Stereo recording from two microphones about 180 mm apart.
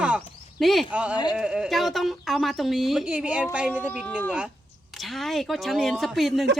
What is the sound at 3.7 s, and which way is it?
Speech, 10° left (ahead or behind).